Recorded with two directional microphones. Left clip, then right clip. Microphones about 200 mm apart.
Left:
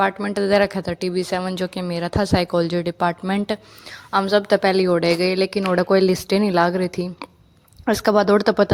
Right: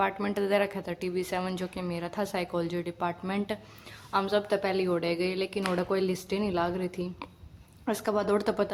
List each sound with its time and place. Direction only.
0.0 s a woman's voice: 25° left (ahead or behind)